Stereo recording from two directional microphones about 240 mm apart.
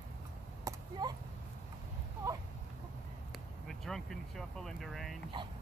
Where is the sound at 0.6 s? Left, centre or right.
Centre.